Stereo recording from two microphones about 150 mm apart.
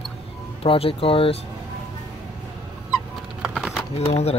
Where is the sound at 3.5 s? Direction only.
Centre (ahead or behind).